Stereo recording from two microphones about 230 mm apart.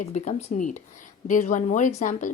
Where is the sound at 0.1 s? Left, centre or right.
Left.